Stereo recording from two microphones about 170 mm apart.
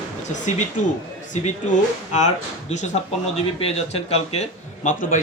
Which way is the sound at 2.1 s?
45° left (ahead or behind).